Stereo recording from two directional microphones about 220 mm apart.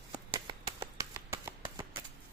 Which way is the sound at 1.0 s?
10° right (ahead or behind).